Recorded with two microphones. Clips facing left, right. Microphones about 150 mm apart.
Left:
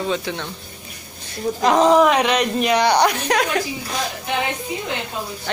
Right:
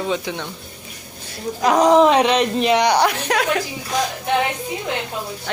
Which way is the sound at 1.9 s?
25° right (ahead or behind).